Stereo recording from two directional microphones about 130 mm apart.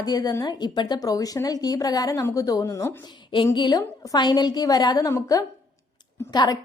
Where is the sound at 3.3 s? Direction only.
35° left (ahead or behind).